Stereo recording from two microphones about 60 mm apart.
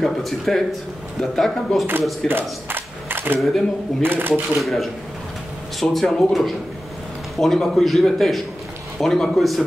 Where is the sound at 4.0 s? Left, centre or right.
Right.